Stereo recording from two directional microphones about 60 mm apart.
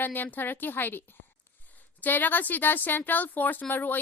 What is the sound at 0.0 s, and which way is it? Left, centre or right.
A woman's voice, left.